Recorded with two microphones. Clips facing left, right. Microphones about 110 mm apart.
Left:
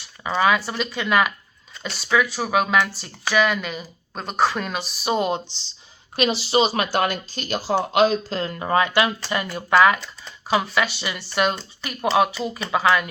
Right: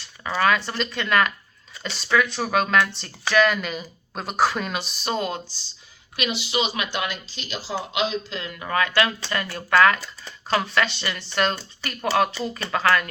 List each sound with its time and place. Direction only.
0.3 s speech: 5° left (ahead or behind)
5.1 s speech: 20° left (ahead or behind)
6.1 s speech: 35° left (ahead or behind)
8.8 s speech: 20° left (ahead or behind)